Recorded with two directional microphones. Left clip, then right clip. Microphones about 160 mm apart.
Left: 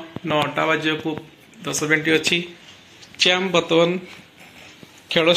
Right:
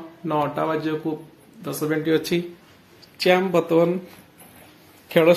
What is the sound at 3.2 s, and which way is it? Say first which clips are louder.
Speech: even; 10° right (ahead or behind).